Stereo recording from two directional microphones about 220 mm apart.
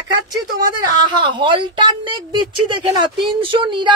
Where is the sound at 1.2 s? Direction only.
20° right (ahead or behind).